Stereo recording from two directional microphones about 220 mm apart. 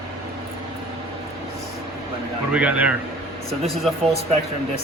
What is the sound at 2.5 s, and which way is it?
Speech, 5° right (ahead or behind).